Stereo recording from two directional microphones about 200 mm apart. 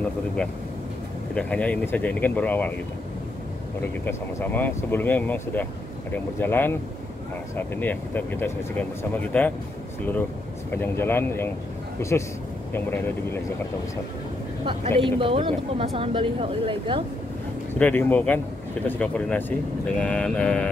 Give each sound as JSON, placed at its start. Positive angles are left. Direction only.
{"t": 1.3, "sound": "speech", "side_deg": 5}
{"t": 4.0, "sound": "speech", "side_deg": 10}
{"t": 10.7, "sound": "speech", "side_deg": 10}
{"t": 15.0, "sound": "speech", "side_deg": -25}
{"t": 17.7, "sound": "speech", "side_deg": 10}
{"t": 20.0, "sound": "mantra", "side_deg": 5}